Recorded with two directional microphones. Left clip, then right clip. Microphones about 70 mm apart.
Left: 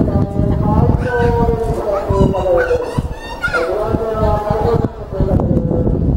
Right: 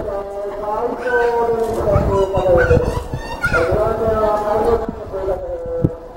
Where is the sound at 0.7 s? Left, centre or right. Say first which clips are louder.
Right 1 dB; centre.